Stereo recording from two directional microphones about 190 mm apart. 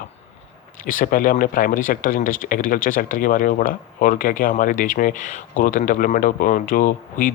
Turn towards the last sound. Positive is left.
turn(degrees=45)  # may be behind; listen again after turning